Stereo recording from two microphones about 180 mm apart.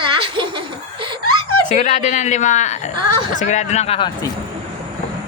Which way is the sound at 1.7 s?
40° left (ahead or behind).